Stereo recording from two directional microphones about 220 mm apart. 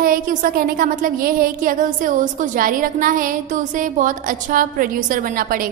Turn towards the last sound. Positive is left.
turn(degrees=-40)  # may be behind; listen again after turning